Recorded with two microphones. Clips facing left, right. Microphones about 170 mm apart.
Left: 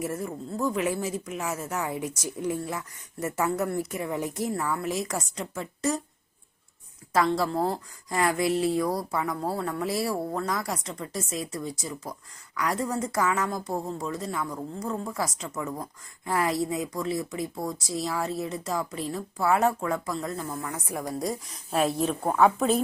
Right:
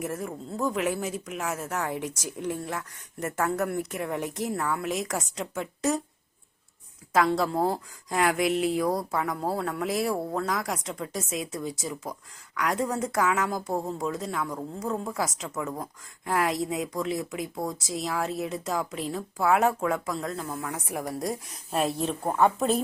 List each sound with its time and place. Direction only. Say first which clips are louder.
0.0 s speech: left 1 dB; centre (ahead or behind)
7.1 s speech: right 1 dB; centre (ahead or behind)